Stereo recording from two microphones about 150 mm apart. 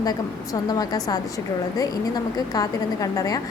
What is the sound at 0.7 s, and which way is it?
A woman's voice, 25° left (ahead or behind).